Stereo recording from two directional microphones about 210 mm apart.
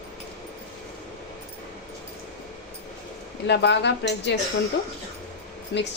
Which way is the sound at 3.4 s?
55° left (ahead or behind).